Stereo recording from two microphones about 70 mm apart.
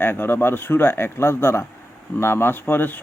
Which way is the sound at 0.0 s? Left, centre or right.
Left.